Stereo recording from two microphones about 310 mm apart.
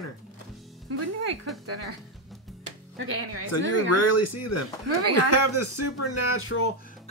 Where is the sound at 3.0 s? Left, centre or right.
Right.